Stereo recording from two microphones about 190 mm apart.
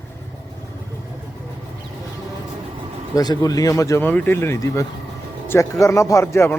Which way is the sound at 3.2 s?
20° left (ahead or behind).